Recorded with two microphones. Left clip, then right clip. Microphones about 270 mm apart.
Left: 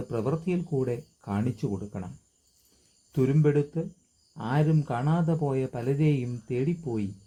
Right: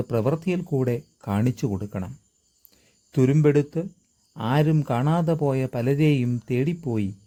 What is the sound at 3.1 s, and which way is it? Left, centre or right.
Speech, right.